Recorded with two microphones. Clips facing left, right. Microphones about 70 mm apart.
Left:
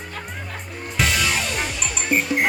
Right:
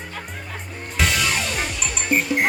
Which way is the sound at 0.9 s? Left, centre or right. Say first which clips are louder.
Even; centre.